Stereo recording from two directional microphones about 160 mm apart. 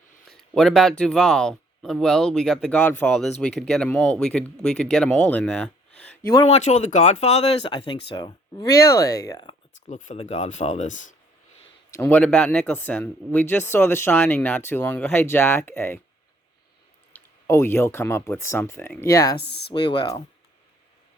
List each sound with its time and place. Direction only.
0.3 s speech: centre (ahead or behind)
6.5 s speech: 45° left (ahead or behind)
7.7 s speech: 30° left (ahead or behind)
9.9 s speech: 45° left (ahead or behind)
11.9 s speech: 10° left (ahead or behind)
17.1 s speech: 15° left (ahead or behind)
19.4 s speech: 90° left
19.7 s speech: 30° left (ahead or behind)